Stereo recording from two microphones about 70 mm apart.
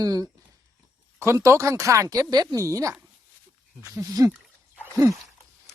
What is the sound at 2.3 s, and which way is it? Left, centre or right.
Speech, right.